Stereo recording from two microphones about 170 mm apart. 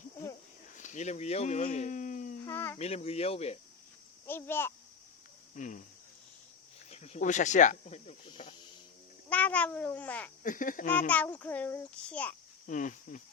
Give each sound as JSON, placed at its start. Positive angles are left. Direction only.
{"t": 0.8, "sound": "speech", "side_deg": 45}
{"t": 2.4, "sound": "speech", "side_deg": 15}
{"t": 2.7, "sound": "speech", "side_deg": 40}
{"t": 4.3, "sound": "a child's voice", "side_deg": 15}
{"t": 5.5, "sound": "speech", "side_deg": 45}
{"t": 6.9, "sound": "speech", "side_deg": 40}
{"t": 9.3, "sound": "a child's voice", "side_deg": 10}
{"t": 10.4, "sound": "speech", "side_deg": 50}
{"t": 11.1, "sound": "a child's voice", "side_deg": 10}
{"t": 12.6, "sound": "speech", "side_deg": 50}